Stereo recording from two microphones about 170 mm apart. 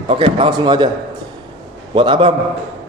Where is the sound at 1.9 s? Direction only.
30° right (ahead or behind).